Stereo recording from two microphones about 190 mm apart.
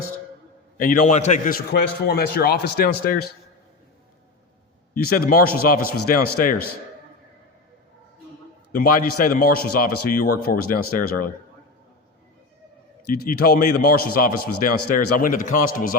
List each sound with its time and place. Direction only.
0.8 s a man's voice: 45° left (ahead or behind)
5.0 s a man's voice: 50° left (ahead or behind)
8.7 s a man's voice: 50° left (ahead or behind)
13.2 s a man's voice: 50° left (ahead or behind)